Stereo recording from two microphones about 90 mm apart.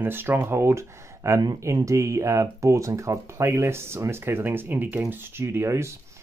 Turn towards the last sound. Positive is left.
turn(degrees=-30)  # may be behind; listen again after turning